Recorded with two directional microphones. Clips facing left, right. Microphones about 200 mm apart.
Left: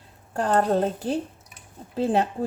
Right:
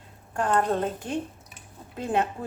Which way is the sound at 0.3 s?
35° left (ahead or behind).